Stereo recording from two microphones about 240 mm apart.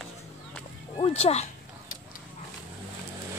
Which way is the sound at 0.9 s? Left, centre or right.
Left.